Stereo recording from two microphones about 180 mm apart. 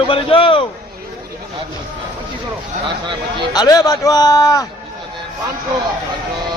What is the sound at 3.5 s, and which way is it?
A man's voice, 20° left (ahead or behind).